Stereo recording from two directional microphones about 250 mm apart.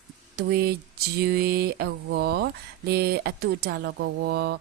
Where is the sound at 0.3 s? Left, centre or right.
Right.